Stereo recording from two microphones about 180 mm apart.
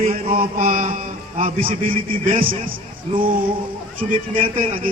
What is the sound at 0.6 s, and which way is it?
Speech, 50° right (ahead or behind).